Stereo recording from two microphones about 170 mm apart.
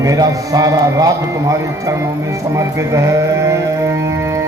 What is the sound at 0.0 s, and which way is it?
A man's voice, 20° right (ahead or behind).